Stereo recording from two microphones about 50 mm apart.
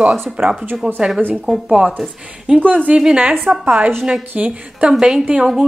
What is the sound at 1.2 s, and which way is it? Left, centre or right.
Speech, right.